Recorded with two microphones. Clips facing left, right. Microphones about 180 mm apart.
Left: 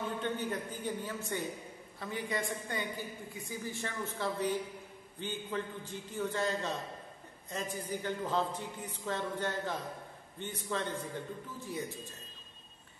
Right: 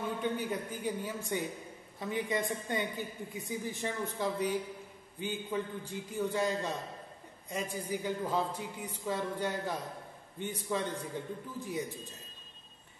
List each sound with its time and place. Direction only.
0.2 s a woman's voice: 10° right (ahead or behind)